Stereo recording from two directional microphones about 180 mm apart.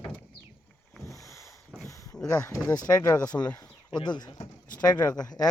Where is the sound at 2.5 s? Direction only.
20° left (ahead or behind).